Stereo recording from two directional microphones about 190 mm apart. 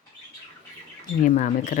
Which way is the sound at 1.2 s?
40° left (ahead or behind).